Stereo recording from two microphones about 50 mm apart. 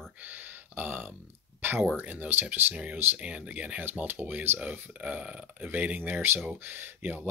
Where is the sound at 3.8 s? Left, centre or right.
Right.